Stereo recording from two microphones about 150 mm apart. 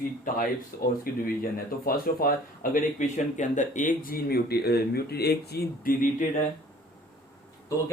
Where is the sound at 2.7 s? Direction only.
55° left (ahead or behind).